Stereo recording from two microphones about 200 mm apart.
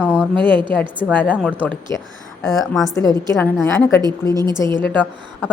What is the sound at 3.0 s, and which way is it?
A woman's voice, 10° left (ahead or behind).